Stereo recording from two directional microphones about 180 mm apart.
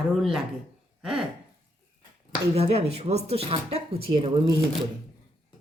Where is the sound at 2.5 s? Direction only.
35° right (ahead or behind).